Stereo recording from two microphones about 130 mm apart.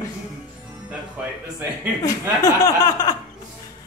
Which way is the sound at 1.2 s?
10° right (ahead or behind).